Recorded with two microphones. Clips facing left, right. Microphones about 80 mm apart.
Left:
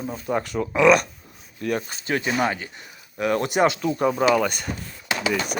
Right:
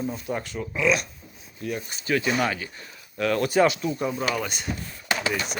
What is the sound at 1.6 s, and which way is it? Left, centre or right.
Speech, left.